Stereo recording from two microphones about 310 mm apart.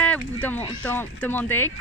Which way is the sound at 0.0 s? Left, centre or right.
Centre.